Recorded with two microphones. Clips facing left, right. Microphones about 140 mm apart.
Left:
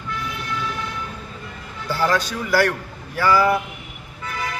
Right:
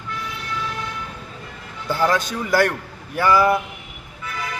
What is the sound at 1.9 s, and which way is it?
A man's voice, 20° right (ahead or behind).